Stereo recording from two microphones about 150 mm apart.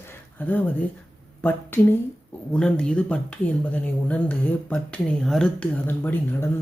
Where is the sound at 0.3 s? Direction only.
10° left (ahead or behind).